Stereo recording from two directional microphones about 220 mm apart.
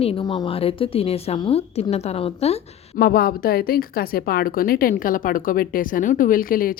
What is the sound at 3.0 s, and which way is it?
A woman's voice, 45° left (ahead or behind).